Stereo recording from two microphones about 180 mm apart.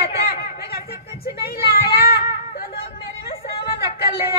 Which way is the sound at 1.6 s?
60° left (ahead or behind).